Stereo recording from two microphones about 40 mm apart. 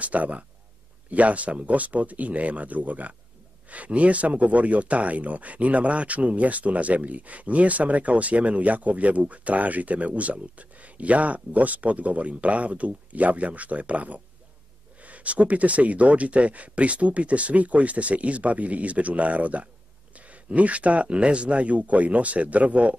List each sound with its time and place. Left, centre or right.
0.0 s speech: right